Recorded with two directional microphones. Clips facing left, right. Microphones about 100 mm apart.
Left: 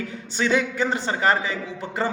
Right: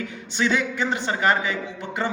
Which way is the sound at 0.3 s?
40° left (ahead or behind).